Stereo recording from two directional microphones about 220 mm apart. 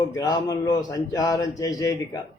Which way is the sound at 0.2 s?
15° left (ahead or behind).